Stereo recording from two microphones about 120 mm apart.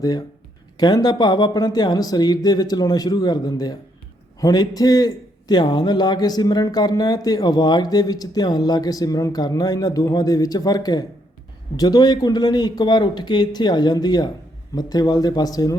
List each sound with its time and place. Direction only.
0.0 s a man's voice: 35° left (ahead or behind)